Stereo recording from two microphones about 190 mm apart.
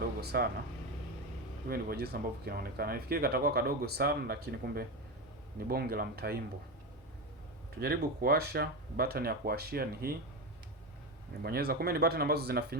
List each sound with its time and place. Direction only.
0.2 s speech: 55° right (ahead or behind)
1.6 s speech: 55° right (ahead or behind)
7.8 s speech: 55° right (ahead or behind)
11.4 s speech: 55° right (ahead or behind)